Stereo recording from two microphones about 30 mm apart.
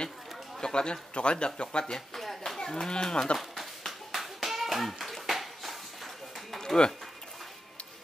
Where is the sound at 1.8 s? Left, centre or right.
Centre.